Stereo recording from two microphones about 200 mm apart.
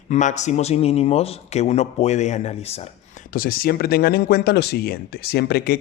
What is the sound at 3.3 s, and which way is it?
Speech, 45° left (ahead or behind).